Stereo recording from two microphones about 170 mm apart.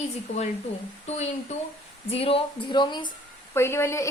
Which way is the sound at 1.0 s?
40° left (ahead or behind).